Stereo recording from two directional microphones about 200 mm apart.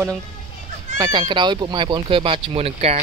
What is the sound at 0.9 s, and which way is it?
A child's voice, 25° right (ahead or behind).